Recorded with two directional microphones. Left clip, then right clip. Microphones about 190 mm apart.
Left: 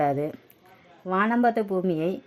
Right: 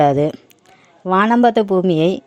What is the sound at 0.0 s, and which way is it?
A woman's voice, 35° right (ahead or behind).